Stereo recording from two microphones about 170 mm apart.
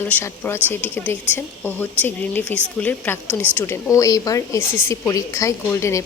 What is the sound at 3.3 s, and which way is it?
Speech, 10° right (ahead or behind).